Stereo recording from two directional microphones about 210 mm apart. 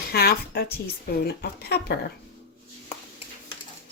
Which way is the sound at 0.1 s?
50° left (ahead or behind).